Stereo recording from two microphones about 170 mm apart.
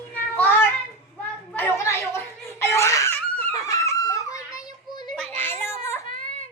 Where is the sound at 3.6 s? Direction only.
20° left (ahead or behind).